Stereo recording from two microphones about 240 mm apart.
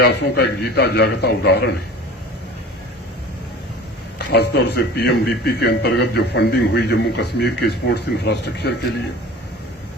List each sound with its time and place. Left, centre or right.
0.0 s a man's voice: left
4.3 s a man's voice: left